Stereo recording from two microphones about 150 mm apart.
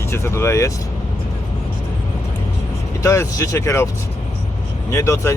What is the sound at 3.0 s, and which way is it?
Speech, 20° left (ahead or behind).